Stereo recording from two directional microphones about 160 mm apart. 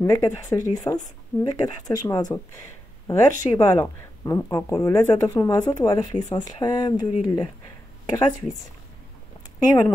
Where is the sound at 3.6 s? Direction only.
20° left (ahead or behind).